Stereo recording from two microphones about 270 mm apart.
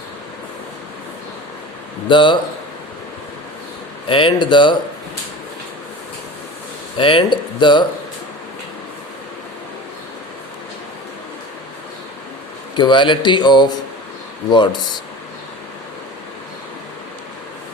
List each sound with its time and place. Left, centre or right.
2.0 s speech: centre
4.1 s speech: centre
6.9 s speech: centre
12.7 s speech: centre